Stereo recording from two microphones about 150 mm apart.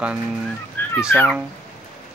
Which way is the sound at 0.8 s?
10° left (ahead or behind).